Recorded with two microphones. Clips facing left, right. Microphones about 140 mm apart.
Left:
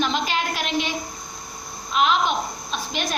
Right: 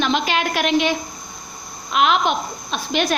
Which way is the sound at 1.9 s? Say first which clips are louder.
Right 3 dB; 70° right (ahead or behind).